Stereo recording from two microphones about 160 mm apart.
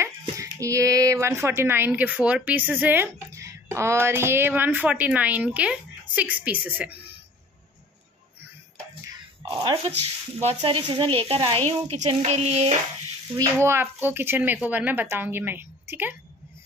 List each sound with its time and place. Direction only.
0.2 s speech: 20° right (ahead or behind)
9.1 s a sound: 30° right (ahead or behind)
10.5 s speech: 30° right (ahead or behind)
13.4 s speech: 15° right (ahead or behind)